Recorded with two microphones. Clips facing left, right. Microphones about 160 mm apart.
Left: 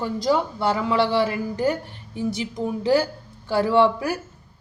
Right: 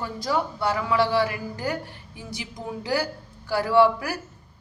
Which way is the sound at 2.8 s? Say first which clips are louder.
Left 6 dB; 25° left (ahead or behind).